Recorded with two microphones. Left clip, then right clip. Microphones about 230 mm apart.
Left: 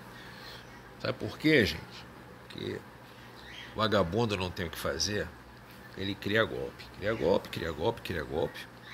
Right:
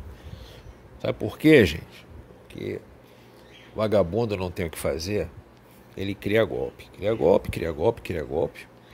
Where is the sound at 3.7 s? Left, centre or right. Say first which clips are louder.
Right 6 dB; right.